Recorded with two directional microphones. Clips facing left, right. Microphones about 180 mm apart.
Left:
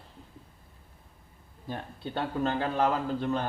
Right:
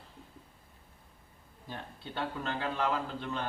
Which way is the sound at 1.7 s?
45° left (ahead or behind).